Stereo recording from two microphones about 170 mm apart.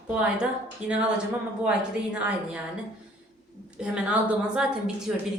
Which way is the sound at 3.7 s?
5° right (ahead or behind).